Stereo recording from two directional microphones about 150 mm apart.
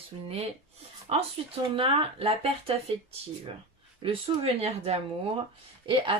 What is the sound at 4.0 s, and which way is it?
Speech, 40° right (ahead or behind).